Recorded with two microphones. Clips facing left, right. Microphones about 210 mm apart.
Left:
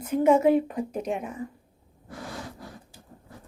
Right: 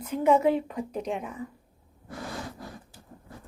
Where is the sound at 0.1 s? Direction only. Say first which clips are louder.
Left 3 dB; 50° left (ahead or behind).